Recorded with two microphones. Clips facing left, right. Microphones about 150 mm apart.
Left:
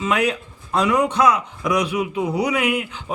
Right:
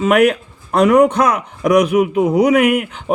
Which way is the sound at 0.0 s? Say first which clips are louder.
Right 8 dB; 60° right (ahead or behind).